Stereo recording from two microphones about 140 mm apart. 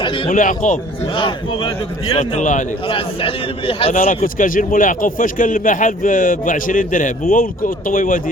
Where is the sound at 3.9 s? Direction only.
70° left (ahead or behind).